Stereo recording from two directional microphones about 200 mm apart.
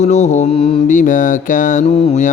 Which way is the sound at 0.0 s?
35° left (ahead or behind).